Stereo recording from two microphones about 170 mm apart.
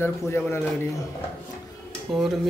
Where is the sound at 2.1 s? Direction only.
Centre (ahead or behind).